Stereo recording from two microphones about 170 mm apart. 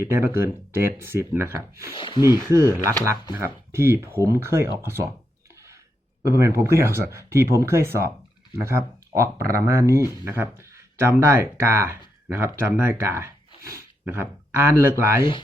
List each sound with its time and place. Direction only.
0.0 s speech: 15° right (ahead or behind)
2.0 s speech: 30° left (ahead or behind)
2.5 s speech: 15° right (ahead or behind)
6.2 s speech: 15° right (ahead or behind)